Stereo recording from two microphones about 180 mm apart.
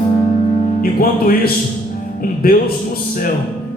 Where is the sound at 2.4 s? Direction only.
55° left (ahead or behind).